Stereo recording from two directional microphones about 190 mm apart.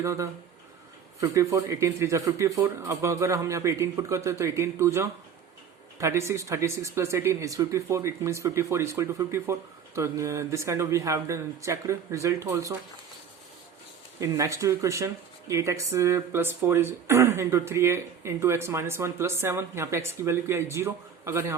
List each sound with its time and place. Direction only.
0.0 s speech: 15° right (ahead or behind)
14.2 s speech: 15° right (ahead or behind)